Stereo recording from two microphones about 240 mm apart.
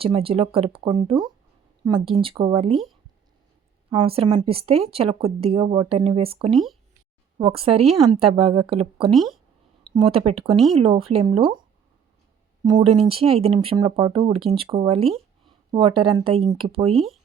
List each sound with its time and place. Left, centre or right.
0.0 s a woman's voice: right
3.8 s a woman's voice: right
6.5 s speech: centre
7.3 s a woman's voice: right
9.1 s speech: centre
9.9 s a woman's voice: right
12.6 s a woman's voice: centre
16.9 s speech: centre